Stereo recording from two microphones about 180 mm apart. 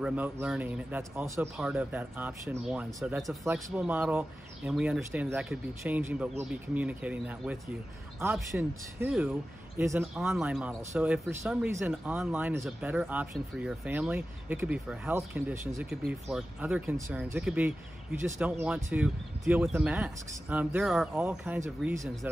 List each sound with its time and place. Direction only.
0.0 s speech: 10° right (ahead or behind)
19.0 s speech: centre (ahead or behind)